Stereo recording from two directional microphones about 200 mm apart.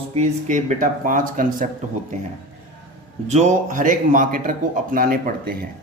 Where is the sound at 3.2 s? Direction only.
35° right (ahead or behind).